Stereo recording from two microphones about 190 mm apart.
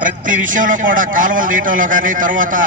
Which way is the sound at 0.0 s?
45° right (ahead or behind).